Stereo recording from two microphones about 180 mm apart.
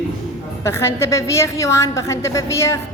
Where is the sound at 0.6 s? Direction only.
15° left (ahead or behind).